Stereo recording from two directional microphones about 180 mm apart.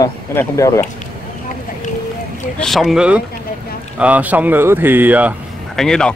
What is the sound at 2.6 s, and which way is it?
Speech, centre (ahead or behind).